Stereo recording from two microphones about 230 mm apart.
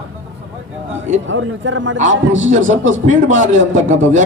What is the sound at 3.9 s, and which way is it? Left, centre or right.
Speech, right.